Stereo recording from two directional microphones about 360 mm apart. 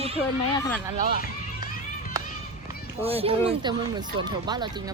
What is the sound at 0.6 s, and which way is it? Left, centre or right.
Speech, centre.